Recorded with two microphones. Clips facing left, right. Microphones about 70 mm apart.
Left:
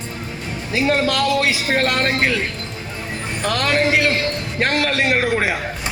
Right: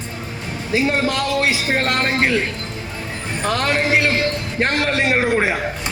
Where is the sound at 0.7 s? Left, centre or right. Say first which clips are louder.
Even; right.